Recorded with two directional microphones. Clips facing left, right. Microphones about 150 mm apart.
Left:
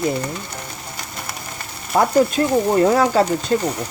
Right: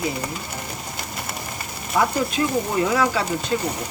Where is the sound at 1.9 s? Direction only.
50° left (ahead or behind).